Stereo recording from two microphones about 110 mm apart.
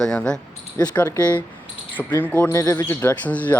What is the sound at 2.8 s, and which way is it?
Speech, 20° left (ahead or behind).